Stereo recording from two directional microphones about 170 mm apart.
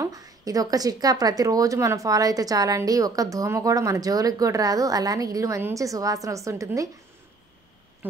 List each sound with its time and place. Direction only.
0.0 s speech: 20° right (ahead or behind)
8.0 s speech: 10° right (ahead or behind)